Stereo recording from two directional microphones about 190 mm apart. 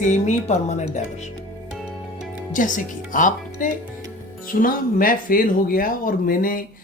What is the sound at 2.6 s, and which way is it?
Speech, 45° left (ahead or behind).